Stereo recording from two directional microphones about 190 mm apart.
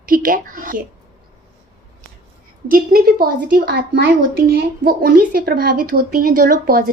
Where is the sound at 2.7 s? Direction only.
50° right (ahead or behind).